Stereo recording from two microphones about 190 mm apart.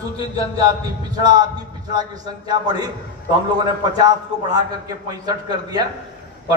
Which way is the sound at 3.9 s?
20° right (ahead or behind).